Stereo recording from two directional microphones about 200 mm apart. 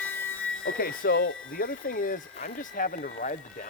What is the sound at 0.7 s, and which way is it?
Speech, 45° left (ahead or behind).